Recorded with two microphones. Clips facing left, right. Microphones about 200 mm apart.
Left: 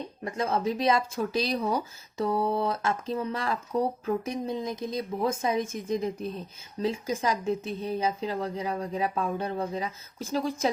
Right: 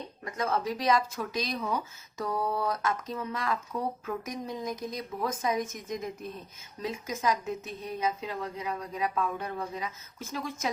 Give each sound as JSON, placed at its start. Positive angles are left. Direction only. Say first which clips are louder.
{"t": 0.3, "sound": "a woman's voice", "louder": "left 3 dB", "side_deg": 25}